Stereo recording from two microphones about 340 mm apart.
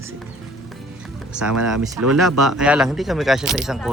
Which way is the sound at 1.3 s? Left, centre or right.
Centre.